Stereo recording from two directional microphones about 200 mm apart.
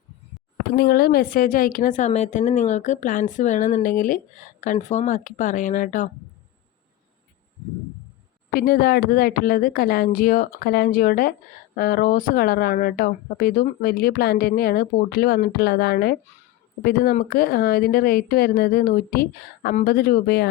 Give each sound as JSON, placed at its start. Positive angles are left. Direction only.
{"t": 0.8, "sound": "a woman's voice", "side_deg": 50}
{"t": 8.4, "sound": "speech", "side_deg": 45}